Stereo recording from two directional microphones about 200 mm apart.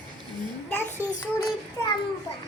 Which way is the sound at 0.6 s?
10° left (ahead or behind).